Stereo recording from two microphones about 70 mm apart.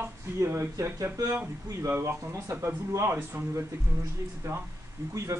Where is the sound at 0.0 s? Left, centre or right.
Right.